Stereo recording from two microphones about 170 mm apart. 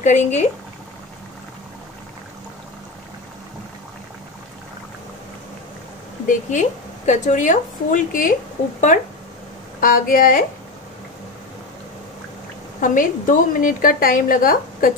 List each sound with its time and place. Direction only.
0.0 s a woman's voice: 45° left (ahead or behind)
6.2 s a woman's voice: 45° left (ahead or behind)
9.8 s a woman's voice: 55° left (ahead or behind)
12.8 s a woman's voice: 50° left (ahead or behind)